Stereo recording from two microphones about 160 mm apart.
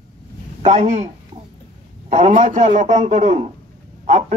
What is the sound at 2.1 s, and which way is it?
A man's voice, 45° right (ahead or behind).